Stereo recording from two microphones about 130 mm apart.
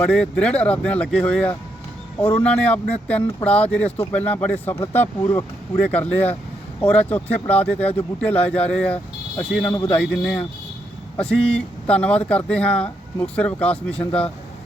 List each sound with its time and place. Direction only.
0.0 s speech: 5° left (ahead or behind)